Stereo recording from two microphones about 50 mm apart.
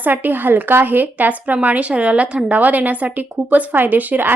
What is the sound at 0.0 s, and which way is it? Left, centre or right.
A woman's voice, right.